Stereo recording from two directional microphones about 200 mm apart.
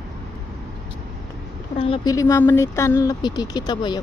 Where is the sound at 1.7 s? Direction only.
25° left (ahead or behind).